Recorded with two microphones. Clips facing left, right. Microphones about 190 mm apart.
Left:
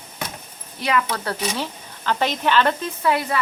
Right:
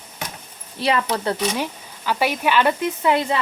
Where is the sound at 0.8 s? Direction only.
30° right (ahead or behind).